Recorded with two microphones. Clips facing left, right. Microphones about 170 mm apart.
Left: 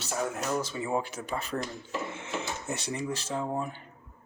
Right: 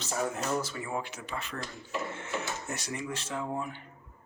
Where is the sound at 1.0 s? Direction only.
40° left (ahead or behind).